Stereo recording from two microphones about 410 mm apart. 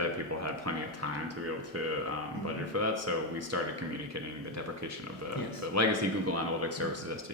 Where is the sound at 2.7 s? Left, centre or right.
Right.